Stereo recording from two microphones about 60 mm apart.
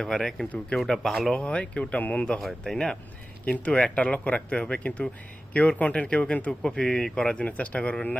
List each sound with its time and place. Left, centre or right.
0.0 s speech: centre
1.4 s speech: centre
2.4 s speech: centre
3.4 s speech: left